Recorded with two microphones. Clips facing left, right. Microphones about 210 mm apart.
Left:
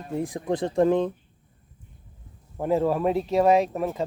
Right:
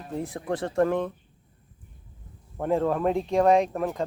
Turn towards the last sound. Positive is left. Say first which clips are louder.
# left 1 dB
turn(degrees=5)  # may be behind; listen again after turning